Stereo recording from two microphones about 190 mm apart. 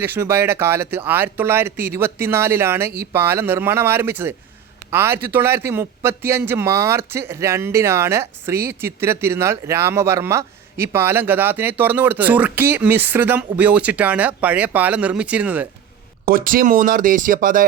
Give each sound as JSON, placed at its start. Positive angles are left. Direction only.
{"t": 0.0, "sound": "speech", "side_deg": -10}
{"t": 16.2, "sound": "speech", "side_deg": -50}